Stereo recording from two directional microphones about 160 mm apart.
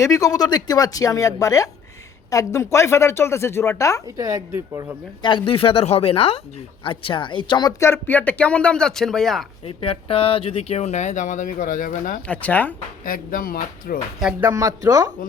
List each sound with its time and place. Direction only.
0.0 s a woman's voice: 20° left (ahead or behind)
4.0 s speech: 20° right (ahead or behind)
5.2 s speech: 30° left (ahead or behind)
7.8 s speech: 15° left (ahead or behind)
9.6 s speech: 35° left (ahead or behind); by 12.2 s 55° left (ahead or behind)
12.3 s speech: 10° left (ahead or behind)
13.1 s speech: 60° left (ahead or behind)
14.2 s speech: 5° right (ahead or behind)
14.5 s speech: 20° right (ahead or behind)